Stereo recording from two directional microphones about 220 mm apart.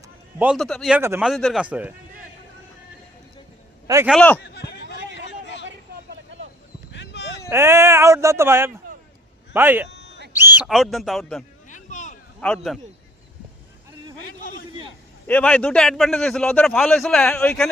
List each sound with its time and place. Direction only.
0.3 s a man's voice: 5° right (ahead or behind)
3.8 s a man's voice: 10° right (ahead or behind)
4.1 s speech: 5° left (ahead or behind)
4.4 s a sound: 50° left (ahead or behind)
6.9 s a sound: 50° left (ahead or behind)
7.5 s speech: 10° right (ahead or behind)
9.9 s a sound: 50° left (ahead or behind)
10.3 s a man's voice: 10° right (ahead or behind)
11.7 s boat: 35° left (ahead or behind)
12.4 s a man's voice: 5° left (ahead or behind)
15.3 s a man's voice: 5° left (ahead or behind)